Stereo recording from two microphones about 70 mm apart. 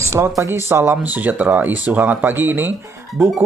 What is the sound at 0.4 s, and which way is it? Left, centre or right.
Speech, right.